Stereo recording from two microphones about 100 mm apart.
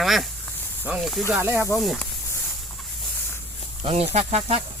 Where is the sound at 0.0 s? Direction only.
Centre (ahead or behind).